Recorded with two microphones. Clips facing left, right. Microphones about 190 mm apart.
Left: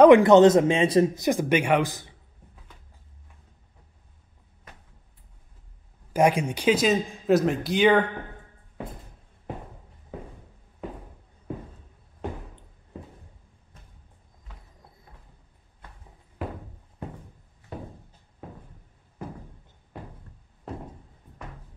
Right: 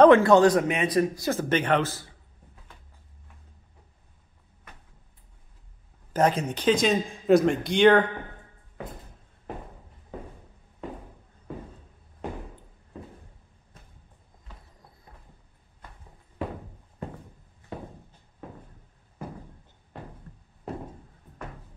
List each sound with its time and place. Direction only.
0.0 s speech: 15° left (ahead or behind)
6.1 s a man's voice: 10° left (ahead or behind)